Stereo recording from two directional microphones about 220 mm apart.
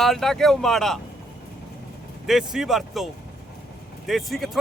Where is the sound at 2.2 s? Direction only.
Centre (ahead or behind).